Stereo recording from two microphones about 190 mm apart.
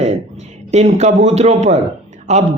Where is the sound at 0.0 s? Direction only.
35° right (ahead or behind).